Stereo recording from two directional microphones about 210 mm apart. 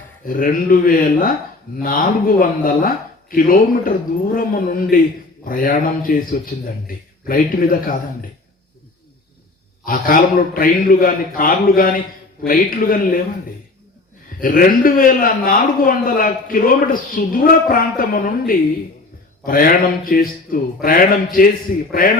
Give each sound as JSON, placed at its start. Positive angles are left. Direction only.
{"t": 0.3, "sound": "a man's voice", "side_deg": 40}
{"t": 9.8, "sound": "a man's voice", "side_deg": 40}
{"t": 14.4, "sound": "a man's voice", "side_deg": 40}